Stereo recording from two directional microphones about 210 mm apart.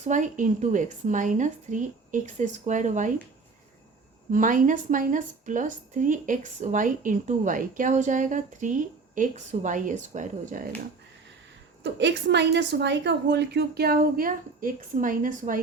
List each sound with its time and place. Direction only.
0.0 s speech: 35° right (ahead or behind)
4.3 s speech: 40° right (ahead or behind)
11.8 s a woman's voice: 55° right (ahead or behind); by 15.6 s 40° right (ahead or behind)